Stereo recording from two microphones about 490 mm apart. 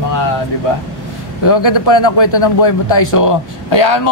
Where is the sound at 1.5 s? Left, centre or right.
Left.